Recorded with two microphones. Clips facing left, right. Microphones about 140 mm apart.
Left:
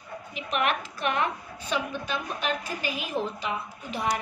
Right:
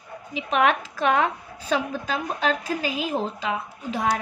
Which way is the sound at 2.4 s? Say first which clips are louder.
Right 7 dB; 90° right.